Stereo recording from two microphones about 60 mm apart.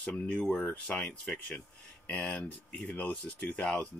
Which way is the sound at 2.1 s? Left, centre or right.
Left.